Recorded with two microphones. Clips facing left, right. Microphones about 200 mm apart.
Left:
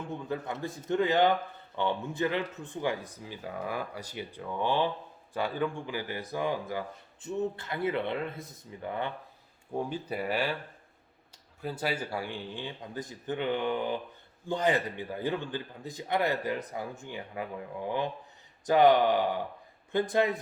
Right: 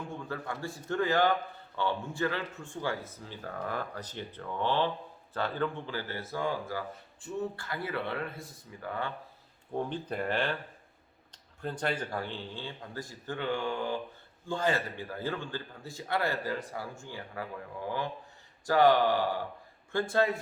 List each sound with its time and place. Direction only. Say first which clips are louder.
0.1 s speech: left 3 dB; 20° left (ahead or behind)
9.7 s speech: even; 10° left (ahead or behind)
11.6 s speech: even; 5° left (ahead or behind)